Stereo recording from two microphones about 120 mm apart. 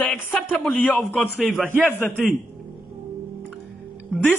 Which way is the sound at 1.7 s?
15° right (ahead or behind).